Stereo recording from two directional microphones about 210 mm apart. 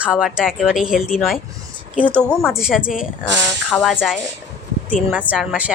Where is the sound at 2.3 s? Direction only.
10° left (ahead or behind).